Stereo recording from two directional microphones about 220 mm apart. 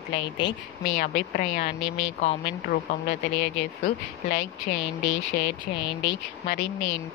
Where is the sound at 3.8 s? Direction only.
50° left (ahead or behind).